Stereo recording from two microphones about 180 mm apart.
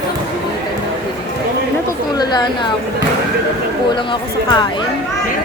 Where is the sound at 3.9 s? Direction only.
25° left (ahead or behind).